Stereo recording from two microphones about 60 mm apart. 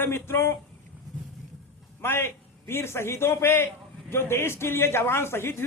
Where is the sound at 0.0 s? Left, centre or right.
Left.